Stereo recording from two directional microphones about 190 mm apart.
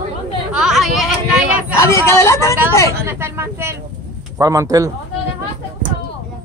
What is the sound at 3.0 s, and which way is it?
Speech, 15° right (ahead or behind).